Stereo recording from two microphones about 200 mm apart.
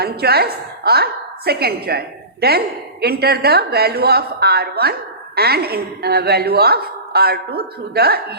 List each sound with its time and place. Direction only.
0.0 s a woman's voice: 50° right (ahead or behind)